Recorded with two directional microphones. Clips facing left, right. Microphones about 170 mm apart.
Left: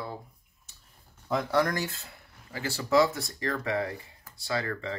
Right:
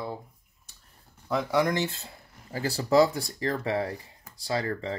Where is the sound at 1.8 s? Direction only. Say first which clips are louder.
Right 4 dB; 30° right (ahead or behind).